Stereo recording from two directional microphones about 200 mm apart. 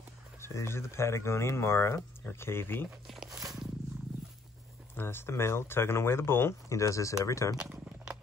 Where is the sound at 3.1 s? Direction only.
Centre (ahead or behind).